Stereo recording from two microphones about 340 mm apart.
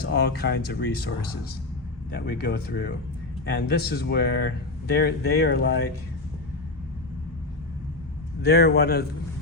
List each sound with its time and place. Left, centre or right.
0.0 s speech: left
2.1 s speech: left
8.4 s speech: left